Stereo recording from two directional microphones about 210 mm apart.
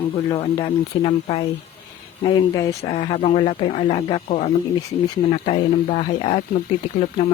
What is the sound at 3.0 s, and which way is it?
Speech, 30° left (ahead or behind).